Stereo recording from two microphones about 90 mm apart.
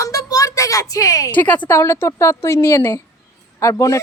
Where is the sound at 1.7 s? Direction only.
30° left (ahead or behind).